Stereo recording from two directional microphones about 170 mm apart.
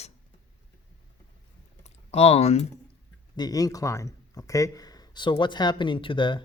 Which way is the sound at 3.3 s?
20° left (ahead or behind).